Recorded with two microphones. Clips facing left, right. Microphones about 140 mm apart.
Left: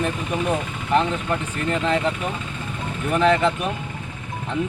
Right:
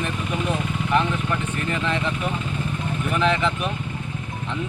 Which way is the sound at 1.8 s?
35° left (ahead or behind).